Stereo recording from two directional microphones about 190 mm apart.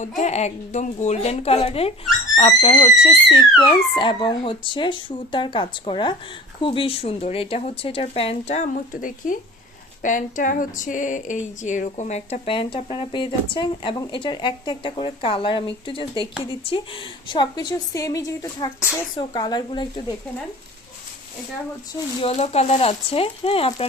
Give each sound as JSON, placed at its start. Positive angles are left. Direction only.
{"t": 0.2, "sound": "speech", "side_deg": 35}
{"t": 22.2, "sound": "speech", "side_deg": 35}